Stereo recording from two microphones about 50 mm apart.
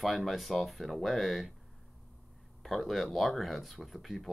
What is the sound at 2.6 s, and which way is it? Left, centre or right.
Speech, centre.